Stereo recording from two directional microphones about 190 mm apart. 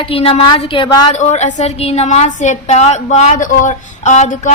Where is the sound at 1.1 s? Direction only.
35° left (ahead or behind).